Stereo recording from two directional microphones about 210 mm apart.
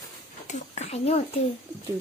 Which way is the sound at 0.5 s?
30° left (ahead or behind).